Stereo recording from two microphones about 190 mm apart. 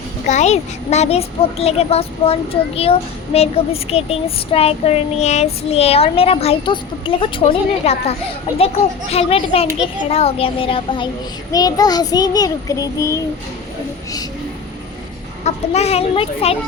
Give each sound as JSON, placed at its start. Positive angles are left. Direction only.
{"t": 0.3, "sound": "a child's voice", "side_deg": 35}
{"t": 15.4, "sound": "a child's voice", "side_deg": 35}